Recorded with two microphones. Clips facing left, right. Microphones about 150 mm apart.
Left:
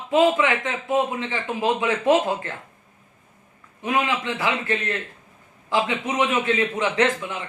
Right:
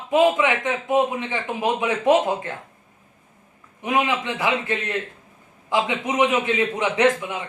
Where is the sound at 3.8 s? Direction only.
20° right (ahead or behind).